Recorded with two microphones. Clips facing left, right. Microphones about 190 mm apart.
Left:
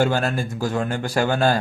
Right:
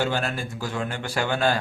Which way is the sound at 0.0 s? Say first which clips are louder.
Left 5 dB; 45° left (ahead or behind).